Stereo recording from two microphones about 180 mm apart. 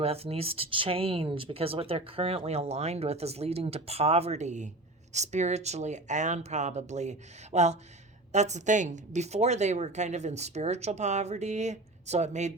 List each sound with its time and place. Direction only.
0.0 s speech: 35° right (ahead or behind)